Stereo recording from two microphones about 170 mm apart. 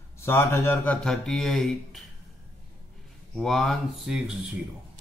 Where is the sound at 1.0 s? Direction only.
5° left (ahead or behind).